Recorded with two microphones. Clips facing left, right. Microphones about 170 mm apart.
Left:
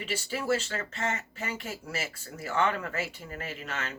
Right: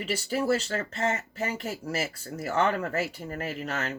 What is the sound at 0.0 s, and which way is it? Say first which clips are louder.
Speech: right 5 dB; 40° right (ahead or behind).